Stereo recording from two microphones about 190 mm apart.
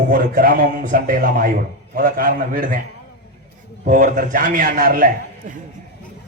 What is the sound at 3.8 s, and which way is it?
A man's voice, 45° right (ahead or behind).